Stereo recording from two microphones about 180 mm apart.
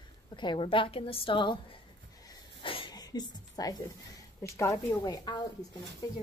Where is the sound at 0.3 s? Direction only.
25° left (ahead or behind).